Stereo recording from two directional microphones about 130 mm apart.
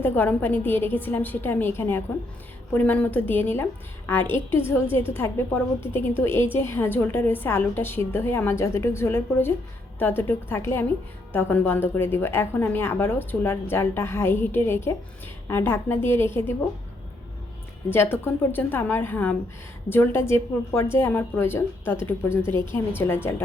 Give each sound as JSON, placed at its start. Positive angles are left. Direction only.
{"t": 0.0, "sound": "a woman's voice", "side_deg": 15}
{"t": 17.8, "sound": "a woman's voice", "side_deg": 15}